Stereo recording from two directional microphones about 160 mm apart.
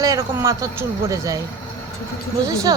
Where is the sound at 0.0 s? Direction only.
20° right (ahead or behind).